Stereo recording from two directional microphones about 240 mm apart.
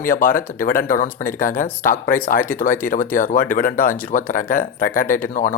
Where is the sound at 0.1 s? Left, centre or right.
Left.